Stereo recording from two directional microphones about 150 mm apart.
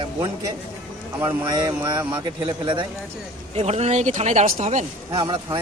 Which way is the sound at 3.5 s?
45° right (ahead or behind).